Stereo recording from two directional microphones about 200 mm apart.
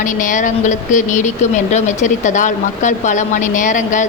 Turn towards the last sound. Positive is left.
turn(degrees=40)  # may be behind; listen again after turning